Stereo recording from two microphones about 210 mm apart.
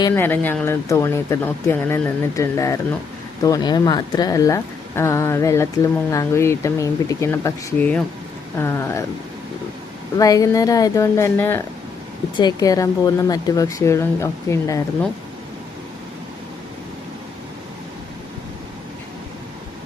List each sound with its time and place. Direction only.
0.1 s speech: 10° left (ahead or behind)
10.2 s speech: 15° left (ahead or behind)